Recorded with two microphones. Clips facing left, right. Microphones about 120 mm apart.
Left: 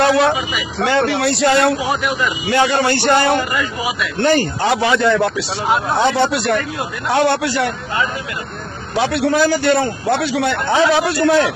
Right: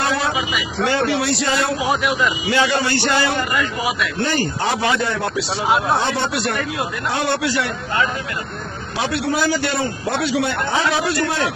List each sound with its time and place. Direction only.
0.0 s vehicle: 70° left (ahead or behind)
0.7 s a man's voice: 65° left (ahead or behind)
1.8 s speech: centre (ahead or behind)
2.5 s speech: 55° left (ahead or behind)
3.5 s speech: centre (ahead or behind)
4.2 s speech: 70° left (ahead or behind); by 5.2 s 90° left
5.3 s speech: centre (ahead or behind)
5.9 s a man's voice: 90° left
7.1 s a man's voice: 65° left (ahead or behind)
7.3 s speech: 50° left (ahead or behind)
9.0 s a man's voice: 70° left (ahead or behind); by 11.3 s 85° left